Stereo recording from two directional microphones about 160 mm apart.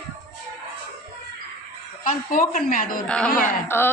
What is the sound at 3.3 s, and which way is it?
Speech, 60° left (ahead or behind).